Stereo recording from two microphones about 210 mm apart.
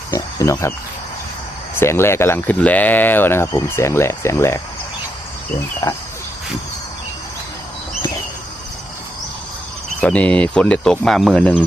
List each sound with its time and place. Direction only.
0.1 s a sound: 15° left (ahead or behind)
1.8 s speech: 10° left (ahead or behind)
5.8 s speech: 15° left (ahead or behind)
10.0 s speech: 5° left (ahead or behind)